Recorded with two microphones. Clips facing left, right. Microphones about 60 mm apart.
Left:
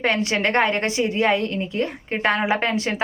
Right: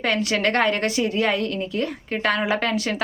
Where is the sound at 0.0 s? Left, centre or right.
Left.